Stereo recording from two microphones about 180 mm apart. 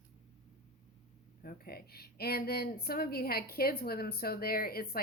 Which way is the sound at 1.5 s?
55° left (ahead or behind).